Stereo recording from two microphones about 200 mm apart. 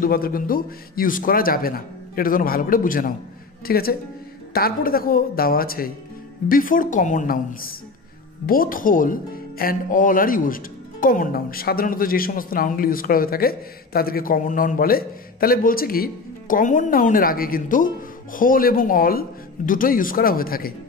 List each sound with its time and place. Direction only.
0.0 s speech: 45° left (ahead or behind)